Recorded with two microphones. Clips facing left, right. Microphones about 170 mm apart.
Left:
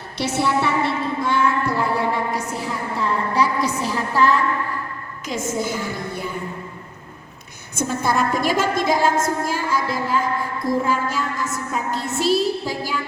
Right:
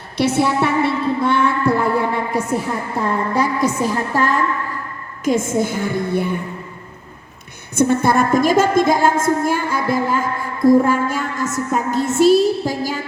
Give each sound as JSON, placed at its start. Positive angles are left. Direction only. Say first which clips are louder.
{"t": 0.2, "sound": "a woman's voice", "louder": "right 4 dB", "side_deg": -55}
{"t": 7.8, "sound": "a woman's voice", "louder": "right 6 dB", "side_deg": -60}